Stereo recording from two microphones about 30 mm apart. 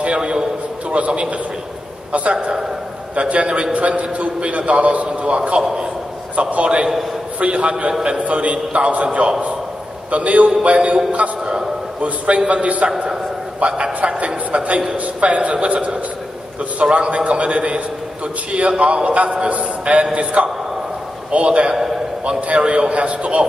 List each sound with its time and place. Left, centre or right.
0.0 s a sound: right
0.9 s a man's voice: right
3.2 s a man's voice: right
16.9 s a man's voice: right